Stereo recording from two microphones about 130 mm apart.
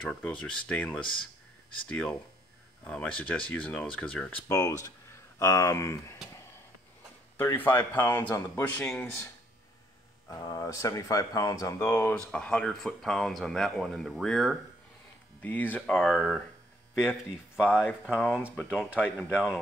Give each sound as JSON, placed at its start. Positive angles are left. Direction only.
{"t": 0.0, "sound": "speech", "side_deg": 10}
{"t": 4.5, "sound": "speech", "side_deg": 25}
{"t": 7.5, "sound": "speech", "side_deg": 15}
{"t": 10.2, "sound": "speech", "side_deg": 25}
{"t": 12.3, "sound": "speech", "side_deg": 10}
{"t": 15.4, "sound": "speech", "side_deg": 15}
{"t": 15.9, "sound": "speech", "side_deg": 0}
{"t": 18.1, "sound": "speech", "side_deg": 10}